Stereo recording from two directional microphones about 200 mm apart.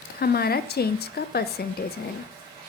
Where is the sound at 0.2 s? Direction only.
50° left (ahead or behind).